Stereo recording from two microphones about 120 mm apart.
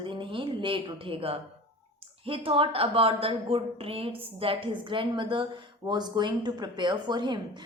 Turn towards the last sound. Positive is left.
turn(degrees=-40)  # may be behind; listen again after turning